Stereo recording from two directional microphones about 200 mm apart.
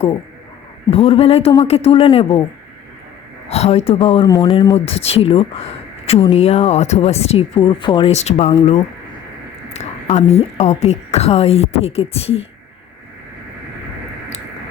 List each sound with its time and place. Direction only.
0.9 s a man's voice: 30° left (ahead or behind)
3.5 s a man's voice: 30° left (ahead or behind)
4.7 s a man's voice: 30° left (ahead or behind)
9.7 s a woman's voice: 35° left (ahead or behind)